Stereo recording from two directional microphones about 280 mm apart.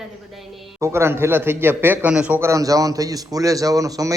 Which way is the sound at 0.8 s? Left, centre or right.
Centre.